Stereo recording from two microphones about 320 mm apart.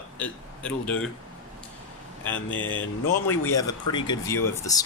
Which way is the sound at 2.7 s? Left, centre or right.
Left.